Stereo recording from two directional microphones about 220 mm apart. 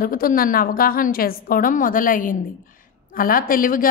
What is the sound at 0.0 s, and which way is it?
A woman's voice, 40° left (ahead or behind).